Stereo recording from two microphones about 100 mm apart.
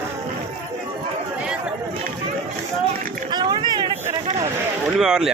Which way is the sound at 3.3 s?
45° right (ahead or behind).